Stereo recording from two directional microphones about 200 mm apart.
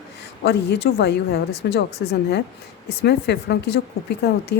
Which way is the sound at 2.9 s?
55° left (ahead or behind).